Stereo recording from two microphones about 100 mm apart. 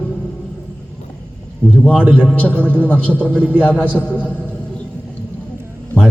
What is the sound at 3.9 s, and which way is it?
Speech, 15° left (ahead or behind).